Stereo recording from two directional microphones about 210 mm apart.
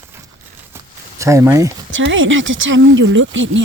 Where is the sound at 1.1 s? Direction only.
15° right (ahead or behind).